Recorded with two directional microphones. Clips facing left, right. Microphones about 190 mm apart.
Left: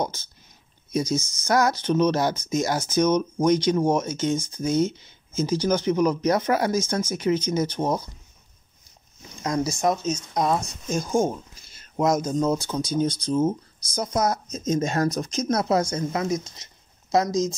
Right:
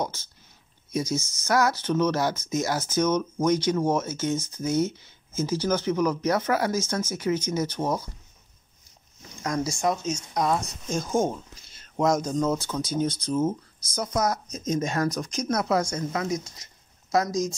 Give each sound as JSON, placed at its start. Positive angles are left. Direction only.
{"t": 0.9, "sound": "speech", "side_deg": 20}
{"t": 9.4, "sound": "speech", "side_deg": 20}
{"t": 12.0, "sound": "speech", "side_deg": 5}